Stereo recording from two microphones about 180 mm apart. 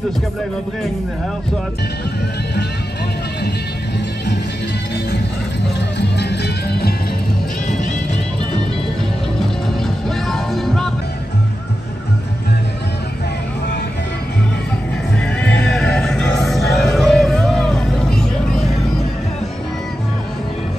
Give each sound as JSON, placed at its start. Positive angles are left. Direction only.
{"t": 5.8, "sound": "music", "side_deg": 70}
{"t": 10.0, "sound": "music", "side_deg": 0}
{"t": 15.6, "sound": "music", "side_deg": 5}